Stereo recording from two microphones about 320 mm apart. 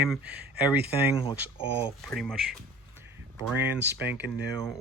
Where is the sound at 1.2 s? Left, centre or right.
Centre.